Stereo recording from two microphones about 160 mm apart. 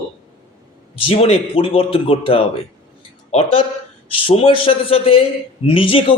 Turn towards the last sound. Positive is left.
turn(degrees=35)  # may be behind; listen again after turning